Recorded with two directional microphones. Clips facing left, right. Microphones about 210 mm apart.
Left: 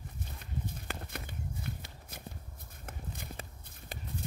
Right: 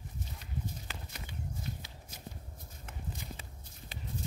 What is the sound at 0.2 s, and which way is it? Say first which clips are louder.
Horse: left 1 dB; 55° left (ahead or behind).